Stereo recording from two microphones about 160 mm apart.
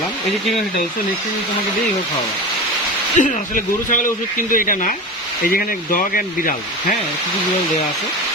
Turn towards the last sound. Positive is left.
turn(degrees=60)  # may be behind; listen again after turning